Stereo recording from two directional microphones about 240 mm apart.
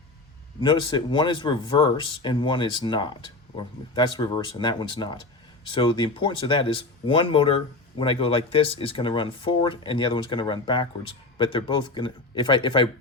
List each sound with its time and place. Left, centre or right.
0.6 s speech: left